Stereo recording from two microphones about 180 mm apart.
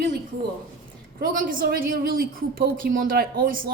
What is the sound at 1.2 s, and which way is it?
A woman's voice, 50° right (ahead or behind).